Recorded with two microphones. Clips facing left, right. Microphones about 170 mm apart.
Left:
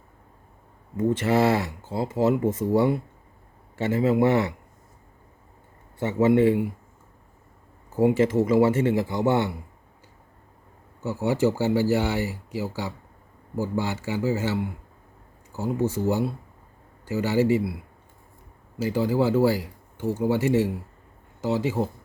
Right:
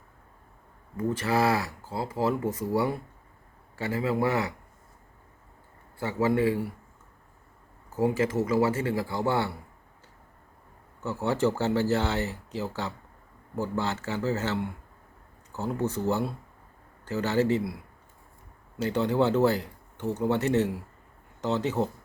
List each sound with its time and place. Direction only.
0.9 s speech: 25° left (ahead or behind)
6.0 s speech: 25° left (ahead or behind)
7.9 s speech: 25° left (ahead or behind)
11.0 s speech: 10° left (ahead or behind)
18.8 s speech: 5° left (ahead or behind)